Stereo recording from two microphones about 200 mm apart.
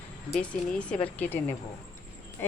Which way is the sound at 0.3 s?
5° left (ahead or behind).